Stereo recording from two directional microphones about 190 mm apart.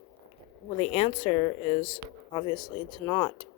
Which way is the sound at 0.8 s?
30° left (ahead or behind).